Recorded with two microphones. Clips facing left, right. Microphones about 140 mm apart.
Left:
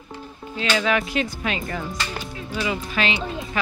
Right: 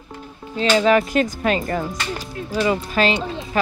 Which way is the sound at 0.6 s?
35° right (ahead or behind).